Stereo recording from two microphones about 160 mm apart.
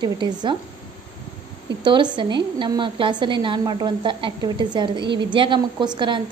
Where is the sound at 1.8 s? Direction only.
30° right (ahead or behind).